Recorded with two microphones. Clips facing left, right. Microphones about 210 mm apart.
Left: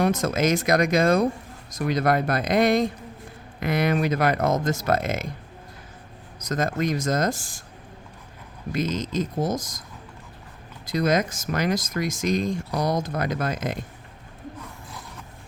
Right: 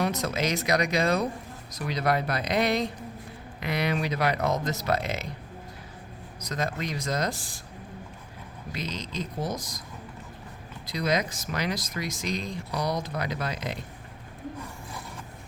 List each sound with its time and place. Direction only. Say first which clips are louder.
0.0 s speech: left 6 dB; 50° left (ahead or behind)
6.4 s speech: left 6 dB; 45° left (ahead or behind)
8.7 s speech: left 9 dB; 45° left (ahead or behind)
10.8 s speech: left 5 dB; 50° left (ahead or behind)